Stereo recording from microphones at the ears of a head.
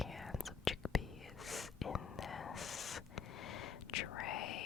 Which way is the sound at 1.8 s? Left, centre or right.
Left.